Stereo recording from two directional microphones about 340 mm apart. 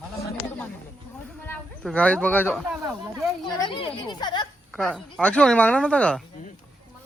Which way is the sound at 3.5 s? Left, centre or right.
Centre.